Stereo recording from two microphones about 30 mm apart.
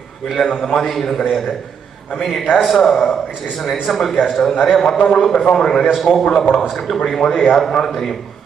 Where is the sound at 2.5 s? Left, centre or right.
Centre.